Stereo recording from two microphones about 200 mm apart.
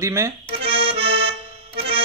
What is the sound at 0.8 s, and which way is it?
Accordion, 30° right (ahead or behind).